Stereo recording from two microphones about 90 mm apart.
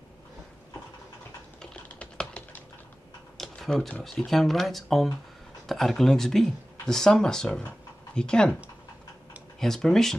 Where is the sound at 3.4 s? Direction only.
5° left (ahead or behind).